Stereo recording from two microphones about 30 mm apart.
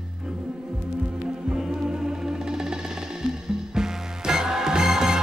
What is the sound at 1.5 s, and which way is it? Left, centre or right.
Music, centre.